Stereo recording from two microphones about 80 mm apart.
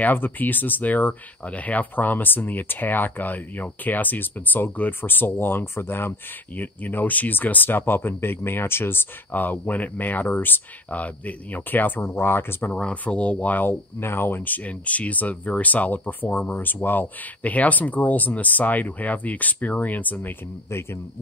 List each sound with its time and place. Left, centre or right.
0.0 s speech: left
12.7 s speech: centre